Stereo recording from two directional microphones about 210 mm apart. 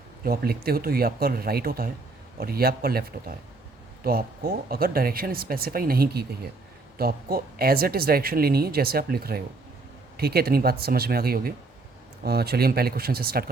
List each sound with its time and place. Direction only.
0.3 s speech: 45° right (ahead or behind)